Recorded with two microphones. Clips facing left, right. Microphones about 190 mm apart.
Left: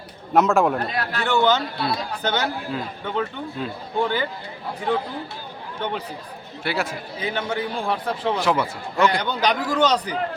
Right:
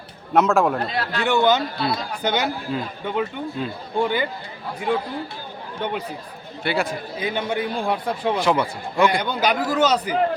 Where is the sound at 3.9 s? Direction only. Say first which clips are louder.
Right 1 dB; 15° right (ahead or behind).